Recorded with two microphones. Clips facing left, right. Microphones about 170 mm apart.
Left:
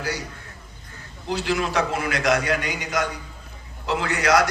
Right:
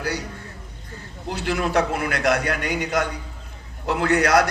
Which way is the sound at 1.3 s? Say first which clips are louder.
Right 1 dB; 55° right (ahead or behind).